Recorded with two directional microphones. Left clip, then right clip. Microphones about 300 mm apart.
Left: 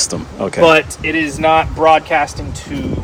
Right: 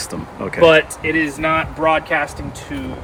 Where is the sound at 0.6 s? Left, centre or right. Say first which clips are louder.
Left 1 dB; left.